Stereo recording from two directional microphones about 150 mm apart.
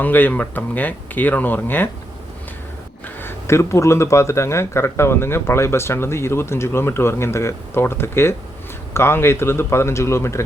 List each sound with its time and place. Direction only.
0.0 s speech: 10° left (ahead or behind)
3.2 s speech: 15° left (ahead or behind)